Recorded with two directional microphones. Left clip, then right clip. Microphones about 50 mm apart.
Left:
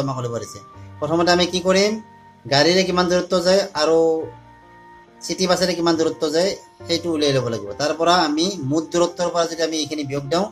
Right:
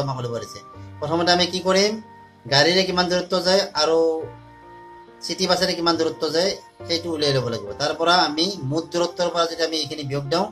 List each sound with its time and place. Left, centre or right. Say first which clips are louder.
0.0 s speech: left 2 dB; left
5.2 s speech: left 2 dB; left